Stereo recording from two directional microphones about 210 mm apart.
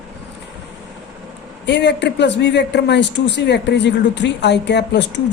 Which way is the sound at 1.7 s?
55° left (ahead or behind).